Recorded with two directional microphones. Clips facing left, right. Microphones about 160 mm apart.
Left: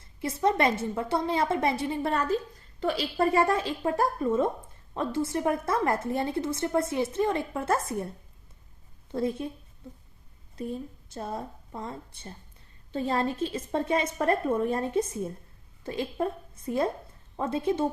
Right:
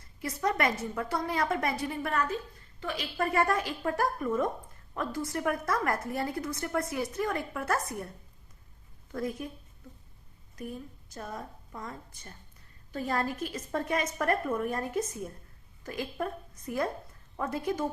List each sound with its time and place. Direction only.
0.0 s a woman's voice: 25° left (ahead or behind)
9.1 s a woman's voice: 25° left (ahead or behind)
10.5 s a woman's voice: 30° left (ahead or behind)